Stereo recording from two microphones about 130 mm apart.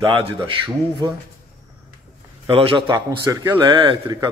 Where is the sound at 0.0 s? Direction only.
40° right (ahead or behind).